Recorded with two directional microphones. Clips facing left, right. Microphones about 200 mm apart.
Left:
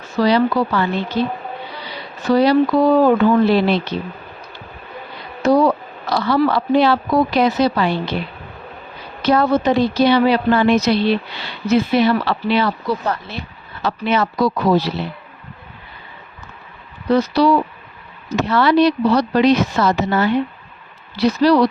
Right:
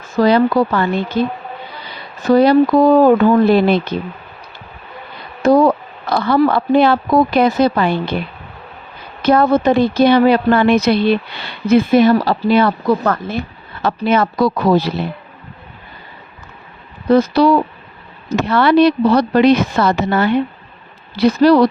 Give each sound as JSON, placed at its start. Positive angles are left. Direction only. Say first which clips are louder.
{"t": 0.0, "sound": "a woman's voice", "louder": "right 3 dB", "side_deg": -50}
{"t": 5.5, "sound": "speech", "louder": "right 3 dB", "side_deg": -50}
{"t": 9.2, "sound": "a woman's voice", "louder": "right 3 dB", "side_deg": -55}
{"t": 17.1, "sound": "a woman's voice", "louder": "right 3 dB", "side_deg": -50}